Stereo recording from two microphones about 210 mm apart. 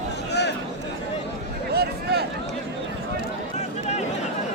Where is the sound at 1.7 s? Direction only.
50° right (ahead or behind).